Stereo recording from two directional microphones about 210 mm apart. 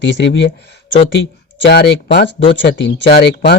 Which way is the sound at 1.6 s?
55° left (ahead or behind).